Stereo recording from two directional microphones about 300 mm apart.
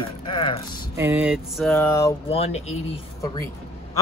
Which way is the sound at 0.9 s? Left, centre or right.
Centre.